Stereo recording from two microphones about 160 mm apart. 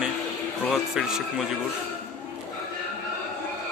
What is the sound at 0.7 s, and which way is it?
Speech, 5° right (ahead or behind).